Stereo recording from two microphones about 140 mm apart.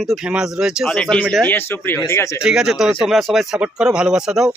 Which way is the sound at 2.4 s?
5° right (ahead or behind).